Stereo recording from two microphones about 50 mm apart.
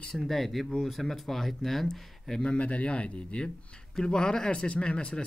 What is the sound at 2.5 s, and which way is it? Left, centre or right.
Speech, left.